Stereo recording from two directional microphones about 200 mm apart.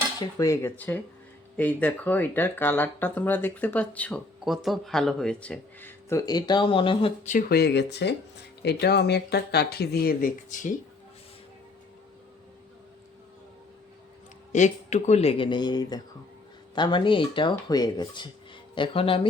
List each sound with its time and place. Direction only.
0.2 s speech: 15° left (ahead or behind)
7.3 s speech: 45° left (ahead or behind)
14.5 s speech: 35° left (ahead or behind)